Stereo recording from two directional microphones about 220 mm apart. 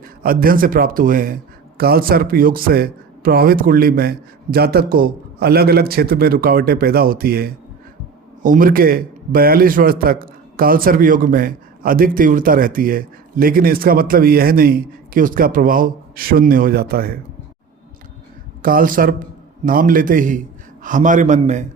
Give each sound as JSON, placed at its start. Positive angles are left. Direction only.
{"t": 0.0, "sound": "a man's voice", "side_deg": -40}
{"t": 18.6, "sound": "a man's voice", "side_deg": -40}